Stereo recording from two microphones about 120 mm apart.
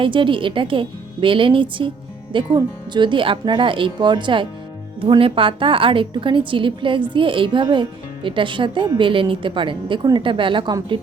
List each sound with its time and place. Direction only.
0.0 s a woman's voice: 45° right (ahead or behind)